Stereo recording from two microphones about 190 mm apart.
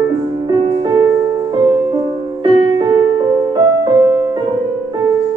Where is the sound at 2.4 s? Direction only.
25° right (ahead or behind).